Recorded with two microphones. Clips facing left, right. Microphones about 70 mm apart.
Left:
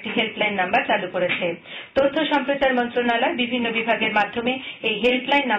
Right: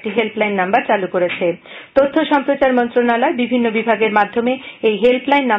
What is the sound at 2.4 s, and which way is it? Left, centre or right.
Speech, right.